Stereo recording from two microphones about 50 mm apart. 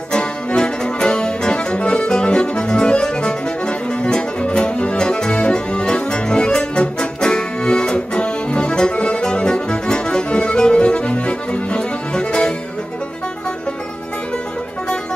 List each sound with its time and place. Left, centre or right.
0.1 s accordion: centre